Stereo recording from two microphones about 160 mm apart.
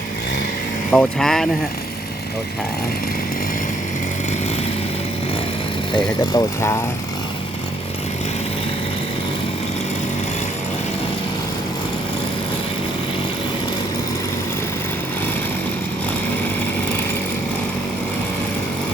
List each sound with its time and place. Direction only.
0.9 s speech: 5° left (ahead or behind)
6.0 s speech: 20° left (ahead or behind)